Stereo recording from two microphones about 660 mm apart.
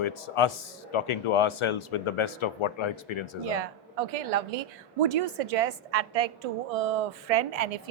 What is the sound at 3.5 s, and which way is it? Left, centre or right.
A woman's voice, right.